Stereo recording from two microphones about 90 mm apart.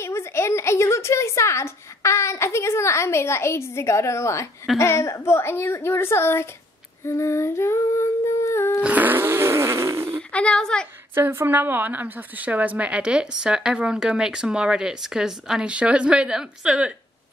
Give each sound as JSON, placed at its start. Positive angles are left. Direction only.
{"t": 0.0, "sound": "a sound", "side_deg": 30}
{"t": 4.7, "sound": "a woman's voice", "side_deg": 30}
{"t": 7.1, "sound": "humming", "side_deg": 30}
{"t": 8.8, "sound": "fart", "side_deg": -20}
{"t": 10.3, "sound": "a woman's voice", "side_deg": 10}
{"t": 11.1, "sound": "a woman's voice", "side_deg": -25}